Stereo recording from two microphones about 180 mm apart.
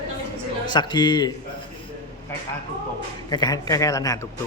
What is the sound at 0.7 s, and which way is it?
Speech, 25° left (ahead or behind).